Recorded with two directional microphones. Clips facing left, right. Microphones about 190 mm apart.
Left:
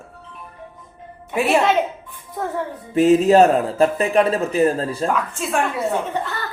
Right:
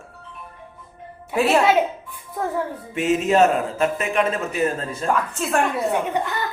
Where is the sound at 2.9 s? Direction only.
35° left (ahead or behind).